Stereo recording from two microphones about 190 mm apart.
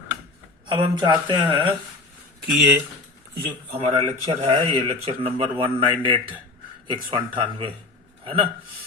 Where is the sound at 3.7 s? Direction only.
30° right (ahead or behind).